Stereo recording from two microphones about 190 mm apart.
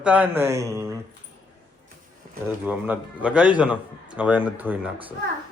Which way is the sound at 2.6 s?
10° right (ahead or behind).